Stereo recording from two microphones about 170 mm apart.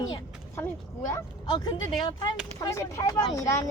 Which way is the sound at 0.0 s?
20° left (ahead or behind).